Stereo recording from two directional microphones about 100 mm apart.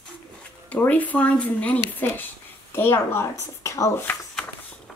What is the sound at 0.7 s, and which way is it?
Speech, 15° left (ahead or behind).